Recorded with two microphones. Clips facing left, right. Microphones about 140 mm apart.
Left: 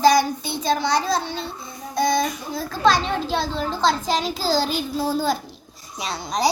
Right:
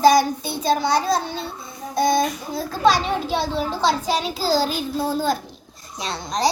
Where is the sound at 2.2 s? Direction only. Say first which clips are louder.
Right 2 dB; 5° right (ahead or behind).